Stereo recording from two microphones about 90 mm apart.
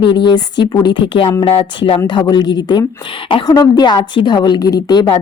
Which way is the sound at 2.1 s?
55° left (ahead or behind).